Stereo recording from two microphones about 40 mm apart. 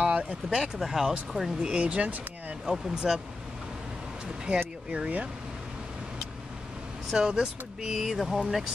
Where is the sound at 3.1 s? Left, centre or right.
Centre.